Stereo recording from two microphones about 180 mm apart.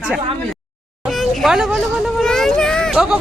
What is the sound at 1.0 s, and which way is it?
Speech, centre (ahead or behind).